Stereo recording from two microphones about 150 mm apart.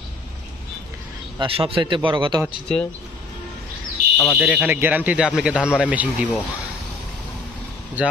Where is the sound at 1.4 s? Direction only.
35° right (ahead or behind).